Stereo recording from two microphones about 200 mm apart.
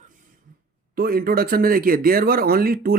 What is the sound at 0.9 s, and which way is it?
Speech, 45° right (ahead or behind).